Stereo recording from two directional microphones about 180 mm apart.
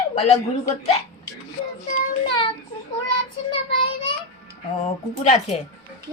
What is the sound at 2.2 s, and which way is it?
Child singing, 30° left (ahead or behind).